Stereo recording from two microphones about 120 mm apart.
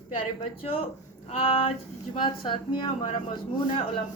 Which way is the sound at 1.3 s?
55° left (ahead or behind).